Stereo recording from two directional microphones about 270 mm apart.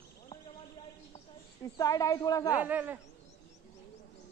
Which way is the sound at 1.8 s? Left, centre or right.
Centre.